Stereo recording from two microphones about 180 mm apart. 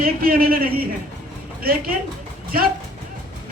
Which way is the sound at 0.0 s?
55° right (ahead or behind).